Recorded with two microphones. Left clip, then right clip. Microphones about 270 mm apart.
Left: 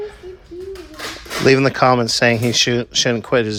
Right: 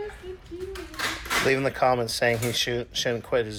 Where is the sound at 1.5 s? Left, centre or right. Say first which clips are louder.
Left 11 dB; left.